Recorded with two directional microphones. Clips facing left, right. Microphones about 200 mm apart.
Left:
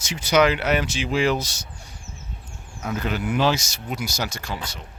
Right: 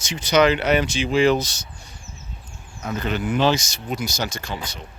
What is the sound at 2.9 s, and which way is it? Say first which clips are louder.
Speech: right 1 dB; 10° left (ahead or behind).